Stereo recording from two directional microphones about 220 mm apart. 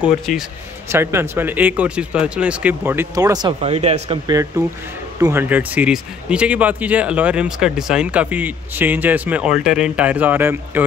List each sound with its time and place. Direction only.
0.0 s speech: centre (ahead or behind); by 4.2 s 30° right (ahead or behind)
4.3 s speech: 15° right (ahead or behind)